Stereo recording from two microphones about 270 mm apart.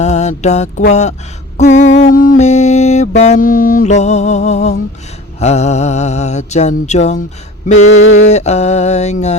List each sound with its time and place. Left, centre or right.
0.0 s mantra: left
8.0 s a sound: left
8.3 s mantra: left